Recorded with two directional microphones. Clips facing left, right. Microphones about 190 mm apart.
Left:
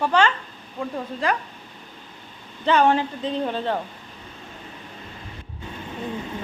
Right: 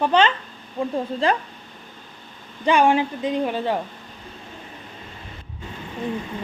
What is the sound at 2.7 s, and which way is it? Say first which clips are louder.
A woman's voice: right 1 dB; 15° right (ahead or behind).